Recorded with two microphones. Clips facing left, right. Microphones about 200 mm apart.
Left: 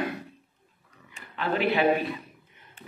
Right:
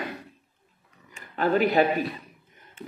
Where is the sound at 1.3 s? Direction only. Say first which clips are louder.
Right 4 dB; 40° right (ahead or behind).